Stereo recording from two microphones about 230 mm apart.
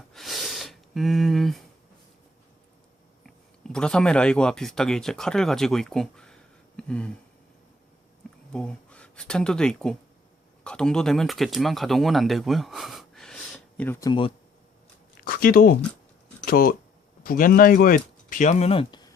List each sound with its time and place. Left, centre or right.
0.1 s a sound: centre
3.2 s speech: centre
8.5 s speech: centre
14.1 s speech: left
15.2 s speech: left